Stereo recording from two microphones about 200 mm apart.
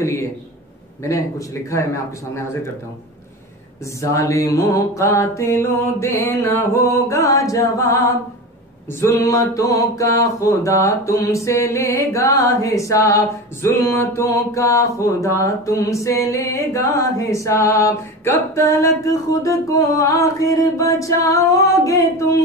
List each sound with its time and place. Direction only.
0.0 s a sound: 15° left (ahead or behind)
1.0 s mantra: 15° left (ahead or behind)
4.0 s mantra: 15° left (ahead or behind)